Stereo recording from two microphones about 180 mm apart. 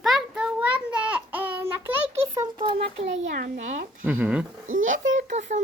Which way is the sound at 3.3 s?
40° right (ahead or behind).